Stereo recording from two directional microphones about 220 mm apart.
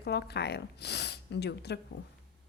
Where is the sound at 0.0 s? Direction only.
50° left (ahead or behind).